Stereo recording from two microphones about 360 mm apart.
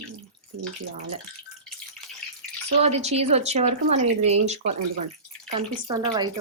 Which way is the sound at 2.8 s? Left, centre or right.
Centre.